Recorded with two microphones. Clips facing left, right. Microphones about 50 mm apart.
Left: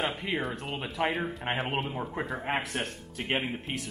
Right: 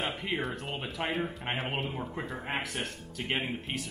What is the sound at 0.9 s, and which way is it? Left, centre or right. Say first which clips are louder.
Speech: left 4 dB; left.